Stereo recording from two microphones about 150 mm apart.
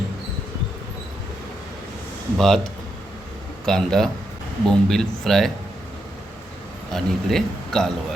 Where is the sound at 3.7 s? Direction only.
5° left (ahead or behind).